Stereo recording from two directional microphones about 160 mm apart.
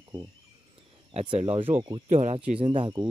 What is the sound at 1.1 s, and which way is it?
Speech, 40° right (ahead or behind).